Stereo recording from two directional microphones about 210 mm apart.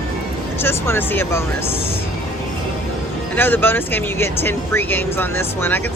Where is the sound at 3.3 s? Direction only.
10° left (ahead or behind).